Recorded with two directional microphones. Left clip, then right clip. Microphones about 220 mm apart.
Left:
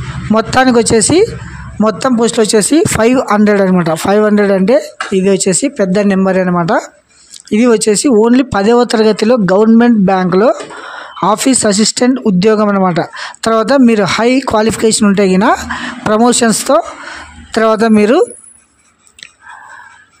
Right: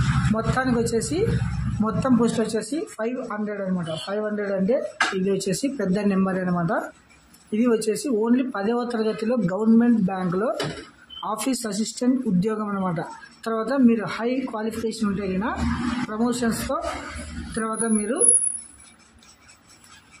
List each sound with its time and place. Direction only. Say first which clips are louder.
0.3 s speech: left 16 dB; 40° left (ahead or behind)